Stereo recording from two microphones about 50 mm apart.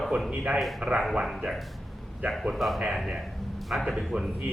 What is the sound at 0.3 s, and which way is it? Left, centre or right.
Speech, right.